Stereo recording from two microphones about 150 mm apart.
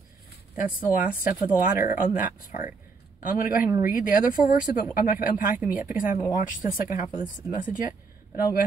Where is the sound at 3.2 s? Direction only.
70° left (ahead or behind).